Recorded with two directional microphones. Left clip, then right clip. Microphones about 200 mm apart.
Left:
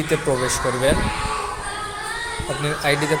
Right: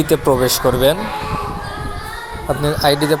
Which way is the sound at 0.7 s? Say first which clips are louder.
Right 7 dB; 45° right (ahead or behind).